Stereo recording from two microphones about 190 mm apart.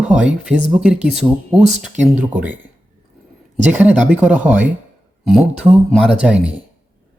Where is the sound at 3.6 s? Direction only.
10° right (ahead or behind).